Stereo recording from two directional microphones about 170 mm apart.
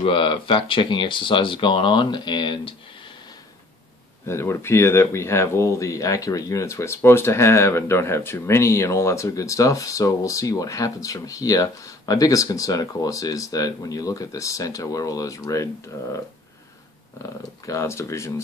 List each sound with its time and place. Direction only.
0.0 s speech: 30° left (ahead or behind)
4.3 s speech: 15° left (ahead or behind)
17.2 s speech: 20° left (ahead or behind)